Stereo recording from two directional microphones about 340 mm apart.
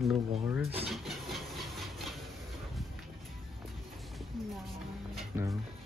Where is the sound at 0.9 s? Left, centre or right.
Centre.